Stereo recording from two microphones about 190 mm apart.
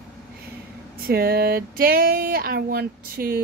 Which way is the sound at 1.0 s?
55° right (ahead or behind).